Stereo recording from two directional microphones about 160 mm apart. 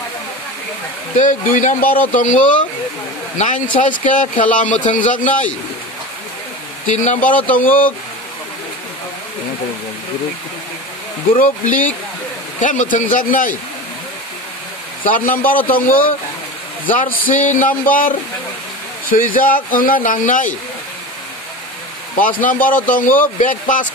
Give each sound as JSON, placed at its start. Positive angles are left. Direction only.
{"t": 1.1, "sound": "speech", "side_deg": 55}
{"t": 6.9, "sound": "speech", "side_deg": 50}
{"t": 11.3, "sound": "speech", "side_deg": 55}
{"t": 15.0, "sound": "speech", "side_deg": 55}
{"t": 22.4, "sound": "speech", "side_deg": 55}